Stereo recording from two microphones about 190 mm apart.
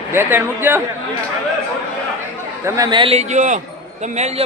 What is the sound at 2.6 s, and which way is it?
Speech, 20° right (ahead or behind).